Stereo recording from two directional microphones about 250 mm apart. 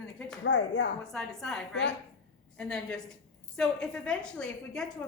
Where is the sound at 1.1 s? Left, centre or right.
Centre.